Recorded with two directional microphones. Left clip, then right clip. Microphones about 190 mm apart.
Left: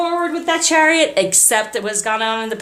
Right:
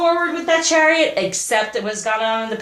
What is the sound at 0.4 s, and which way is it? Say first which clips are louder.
A woman's voice: even; 50° left (ahead or behind).